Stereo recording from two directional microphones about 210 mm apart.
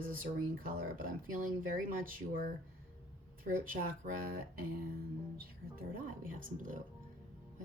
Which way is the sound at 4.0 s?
40° right (ahead or behind).